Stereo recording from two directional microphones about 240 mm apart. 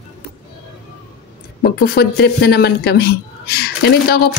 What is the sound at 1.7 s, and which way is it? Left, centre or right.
Speech, left.